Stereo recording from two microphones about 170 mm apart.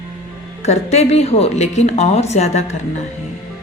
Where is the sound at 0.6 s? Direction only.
40° left (ahead or behind).